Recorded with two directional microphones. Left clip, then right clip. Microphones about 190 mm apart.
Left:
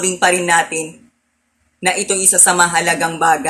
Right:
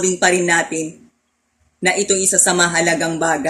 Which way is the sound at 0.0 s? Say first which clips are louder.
Left 1 dB; 20° right (ahead or behind).